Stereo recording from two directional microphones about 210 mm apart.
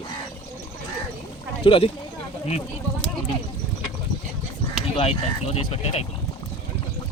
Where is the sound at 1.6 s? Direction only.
25° left (ahead or behind).